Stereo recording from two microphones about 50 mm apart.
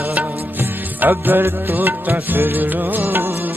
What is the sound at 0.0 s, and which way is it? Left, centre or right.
Music, right.